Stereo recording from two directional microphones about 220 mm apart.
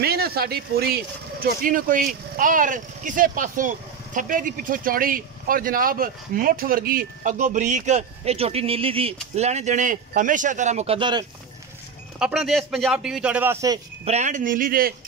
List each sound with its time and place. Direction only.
0.0 s speech: 45° right (ahead or behind); by 11.2 s 20° right (ahead or behind)
12.2 s speech: 5° right (ahead or behind)
14.0 s speech: 30° right (ahead or behind)